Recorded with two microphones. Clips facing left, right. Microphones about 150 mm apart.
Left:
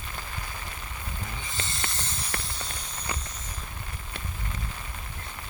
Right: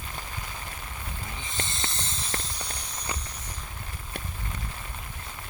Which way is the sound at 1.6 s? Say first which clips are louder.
Even; 20° right (ahead or behind).